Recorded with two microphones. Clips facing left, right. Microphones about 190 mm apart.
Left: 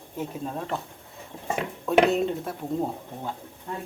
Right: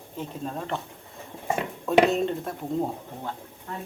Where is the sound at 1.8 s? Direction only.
Centre (ahead or behind).